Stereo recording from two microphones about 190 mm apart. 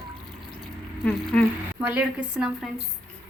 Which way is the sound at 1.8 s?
5° right (ahead or behind).